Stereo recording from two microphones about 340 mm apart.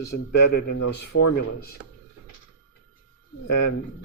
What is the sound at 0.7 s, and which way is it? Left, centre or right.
Speech, left.